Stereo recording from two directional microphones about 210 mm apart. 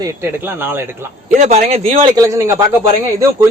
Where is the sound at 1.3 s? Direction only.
35° right (ahead or behind); by 2.5 s 15° right (ahead or behind).